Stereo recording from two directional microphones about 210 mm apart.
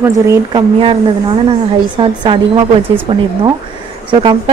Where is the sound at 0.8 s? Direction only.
25° right (ahead or behind).